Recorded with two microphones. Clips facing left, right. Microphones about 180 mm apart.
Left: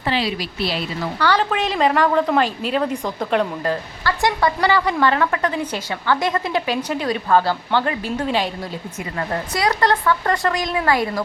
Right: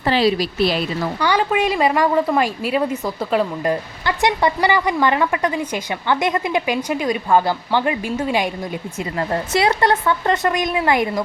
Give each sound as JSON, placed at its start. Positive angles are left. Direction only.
{"t": 0.0, "sound": "speech", "side_deg": -40}
{"t": 1.2, "sound": "a woman's voice", "side_deg": -10}
{"t": 9.1, "sound": "speech", "side_deg": -25}